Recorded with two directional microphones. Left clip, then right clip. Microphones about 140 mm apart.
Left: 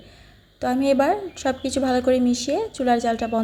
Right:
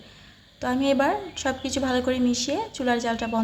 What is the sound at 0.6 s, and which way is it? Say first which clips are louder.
A woman's voice: left 3 dB; 30° left (ahead or behind).